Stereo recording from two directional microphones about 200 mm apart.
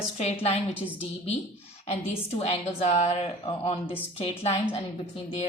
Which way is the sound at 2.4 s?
35° left (ahead or behind).